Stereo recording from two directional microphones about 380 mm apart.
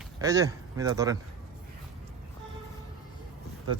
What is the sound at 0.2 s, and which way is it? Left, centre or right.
A man's voice, centre.